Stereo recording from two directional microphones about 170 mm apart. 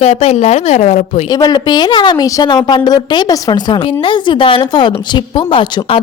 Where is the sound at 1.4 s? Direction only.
25° left (ahead or behind).